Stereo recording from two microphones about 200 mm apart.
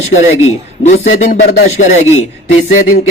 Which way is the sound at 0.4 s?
35° left (ahead or behind).